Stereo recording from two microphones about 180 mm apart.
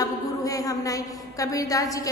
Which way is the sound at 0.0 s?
20° left (ahead or behind).